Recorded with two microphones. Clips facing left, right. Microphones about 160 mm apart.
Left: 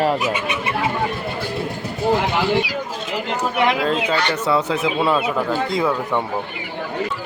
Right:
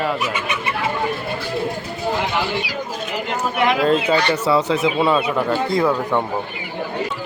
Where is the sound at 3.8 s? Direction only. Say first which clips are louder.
Right 3 dB; 5° right (ahead or behind).